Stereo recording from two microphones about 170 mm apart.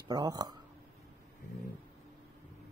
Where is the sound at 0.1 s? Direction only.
25° right (ahead or behind).